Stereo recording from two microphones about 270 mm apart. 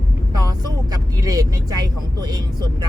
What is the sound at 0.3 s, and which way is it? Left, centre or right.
Vehicle, centre.